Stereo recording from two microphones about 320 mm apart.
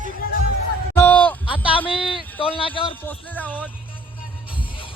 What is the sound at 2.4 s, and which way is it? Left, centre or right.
Speech, centre.